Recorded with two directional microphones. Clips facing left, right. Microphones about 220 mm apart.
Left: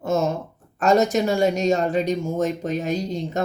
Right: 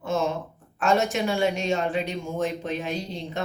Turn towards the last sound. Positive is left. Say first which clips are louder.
# left 6 dB
turn(degrees=45)  # may be behind; listen again after turning